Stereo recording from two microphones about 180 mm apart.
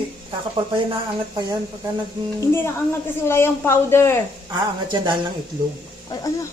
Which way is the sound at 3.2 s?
15° left (ahead or behind).